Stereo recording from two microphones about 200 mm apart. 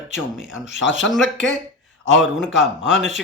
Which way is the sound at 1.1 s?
Centre (ahead or behind).